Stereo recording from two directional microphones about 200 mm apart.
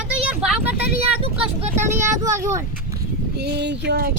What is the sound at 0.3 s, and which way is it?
Vehicle, 5° right (ahead or behind).